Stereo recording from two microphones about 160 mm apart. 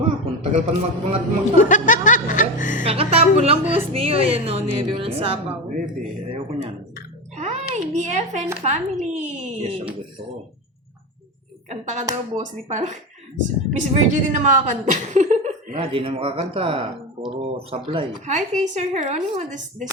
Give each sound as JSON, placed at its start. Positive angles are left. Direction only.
{"t": 0.4, "sound": "a woman's voice", "side_deg": -40}
{"t": 1.5, "sound": "a woman's voice", "side_deg": 50}
{"t": 2.8, "sound": "a woman's voice", "side_deg": -40}
{"t": 6.0, "sound": "a sound", "side_deg": -35}
{"t": 8.6, "sound": "speech", "side_deg": -45}
{"t": 11.7, "sound": "speech", "side_deg": -45}
{"t": 15.8, "sound": "a woman's voice", "side_deg": -35}
{"t": 18.3, "sound": "speech", "side_deg": -45}